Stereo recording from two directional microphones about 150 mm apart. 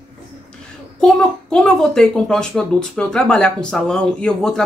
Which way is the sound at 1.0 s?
5° left (ahead or behind).